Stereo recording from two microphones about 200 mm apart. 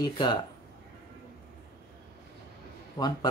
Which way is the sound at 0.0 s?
20° left (ahead or behind).